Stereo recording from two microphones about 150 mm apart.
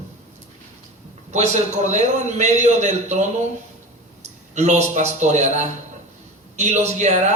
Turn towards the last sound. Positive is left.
turn(degrees=-50)  # may be behind; listen again after turning